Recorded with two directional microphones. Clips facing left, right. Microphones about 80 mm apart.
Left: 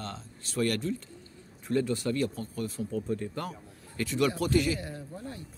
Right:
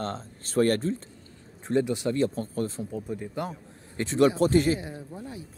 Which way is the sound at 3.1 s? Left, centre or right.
Centre.